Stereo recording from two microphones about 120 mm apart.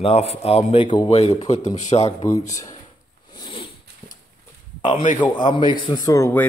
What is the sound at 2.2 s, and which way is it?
Speech, 25° left (ahead or behind).